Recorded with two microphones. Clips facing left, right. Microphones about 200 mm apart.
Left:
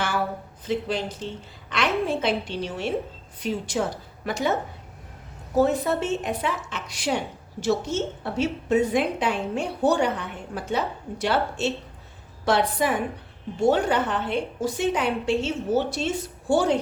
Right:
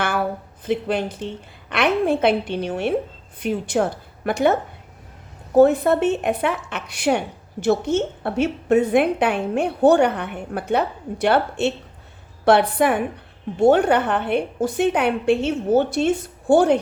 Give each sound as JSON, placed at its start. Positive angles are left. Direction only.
{"t": 0.0, "sound": "a sound", "side_deg": -55}
{"t": 1.7, "sound": "a woman's voice", "side_deg": -60}
{"t": 5.5, "sound": "a woman's voice", "side_deg": -55}